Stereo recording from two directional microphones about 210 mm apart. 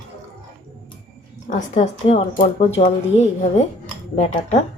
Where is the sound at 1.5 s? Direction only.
35° left (ahead or behind).